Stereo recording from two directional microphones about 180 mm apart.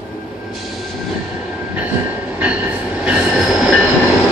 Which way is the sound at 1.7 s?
10° right (ahead or behind).